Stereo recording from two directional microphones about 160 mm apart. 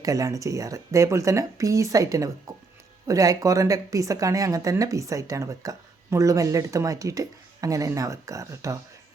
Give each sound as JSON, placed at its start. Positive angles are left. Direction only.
{"t": 0.0, "sound": "speech", "side_deg": -20}